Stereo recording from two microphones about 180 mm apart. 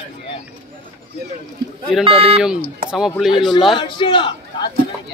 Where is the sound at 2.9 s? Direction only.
Centre (ahead or behind).